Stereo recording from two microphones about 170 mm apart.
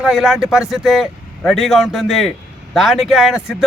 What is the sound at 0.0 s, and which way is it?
Speech, 5° right (ahead or behind).